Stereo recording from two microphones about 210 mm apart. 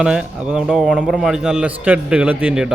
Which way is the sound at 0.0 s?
5° right (ahead or behind).